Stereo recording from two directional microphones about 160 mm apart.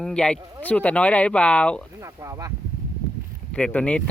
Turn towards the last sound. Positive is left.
turn(degrees=5)  # may be behind; listen again after turning